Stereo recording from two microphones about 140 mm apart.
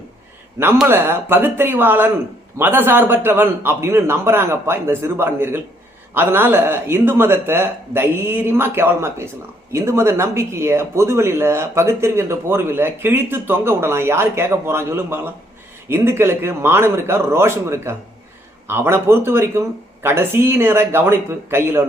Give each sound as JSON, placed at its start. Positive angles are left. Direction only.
{"t": 0.9, "sound": "speech", "side_deg": -15}